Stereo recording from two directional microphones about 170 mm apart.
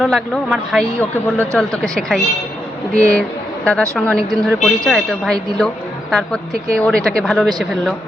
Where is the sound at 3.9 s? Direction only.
5° left (ahead or behind).